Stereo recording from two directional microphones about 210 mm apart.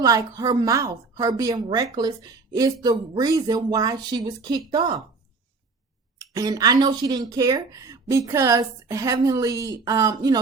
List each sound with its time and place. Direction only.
0.0 s a woman's voice: 15° right (ahead or behind)
6.1 s speech: 15° right (ahead or behind)